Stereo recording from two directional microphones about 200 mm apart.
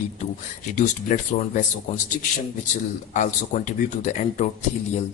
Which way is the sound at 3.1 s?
40° left (ahead or behind).